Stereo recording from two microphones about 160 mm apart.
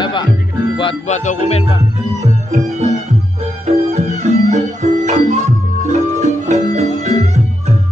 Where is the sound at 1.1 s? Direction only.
45° left (ahead or behind).